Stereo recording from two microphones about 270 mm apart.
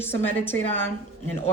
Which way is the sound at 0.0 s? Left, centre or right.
Centre.